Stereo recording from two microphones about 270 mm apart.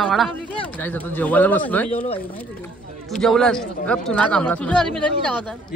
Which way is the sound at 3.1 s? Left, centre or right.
Centre.